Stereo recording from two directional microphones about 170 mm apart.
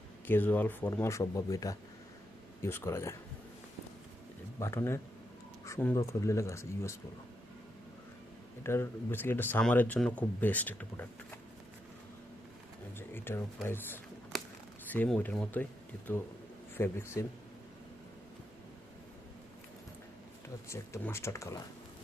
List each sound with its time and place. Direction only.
0.3 s speech: 10° left (ahead or behind)
4.6 s speech: 15° left (ahead or behind)
8.6 s speech: 15° left (ahead or behind)
13.0 s speech: 15° left (ahead or behind)
16.7 s speech: 15° left (ahead or behind)
20.7 s speech: 15° left (ahead or behind)